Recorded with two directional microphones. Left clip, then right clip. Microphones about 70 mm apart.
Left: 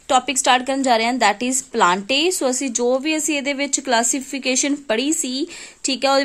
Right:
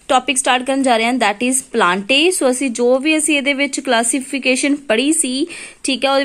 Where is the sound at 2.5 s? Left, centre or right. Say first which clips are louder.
Right 5 dB; centre.